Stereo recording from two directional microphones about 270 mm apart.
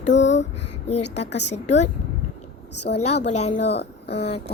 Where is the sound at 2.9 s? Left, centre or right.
Left.